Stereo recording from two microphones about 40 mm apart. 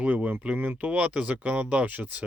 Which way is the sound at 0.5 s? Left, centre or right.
Right.